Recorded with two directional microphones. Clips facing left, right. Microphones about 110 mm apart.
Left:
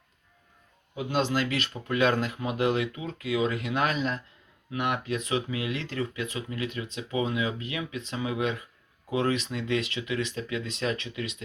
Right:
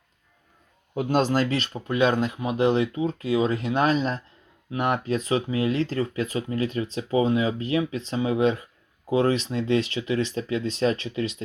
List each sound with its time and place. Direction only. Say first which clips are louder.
0.9 s speech: right 5 dB; 45° right (ahead or behind)